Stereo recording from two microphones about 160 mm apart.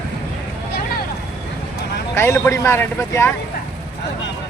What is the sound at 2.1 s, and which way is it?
A man's voice, 15° left (ahead or behind).